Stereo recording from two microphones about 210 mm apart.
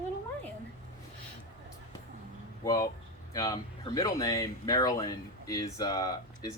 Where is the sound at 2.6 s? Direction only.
15° left (ahead or behind).